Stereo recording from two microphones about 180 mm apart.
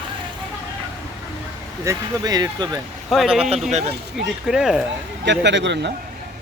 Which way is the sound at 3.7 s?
40° right (ahead or behind).